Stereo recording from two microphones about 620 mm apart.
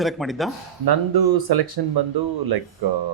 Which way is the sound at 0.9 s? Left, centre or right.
Right.